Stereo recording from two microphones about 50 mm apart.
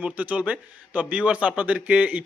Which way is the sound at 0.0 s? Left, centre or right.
Right.